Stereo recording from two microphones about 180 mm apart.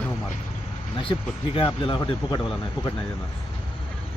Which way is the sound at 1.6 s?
25° left (ahead or behind).